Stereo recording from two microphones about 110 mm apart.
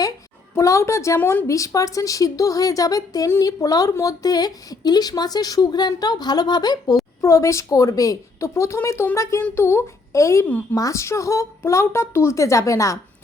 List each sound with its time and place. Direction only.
0.5 s speech: 25° left (ahead or behind)
7.2 s a woman's voice: 30° left (ahead or behind)